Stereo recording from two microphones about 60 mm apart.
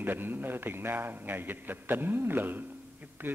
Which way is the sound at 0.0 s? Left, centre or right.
Right.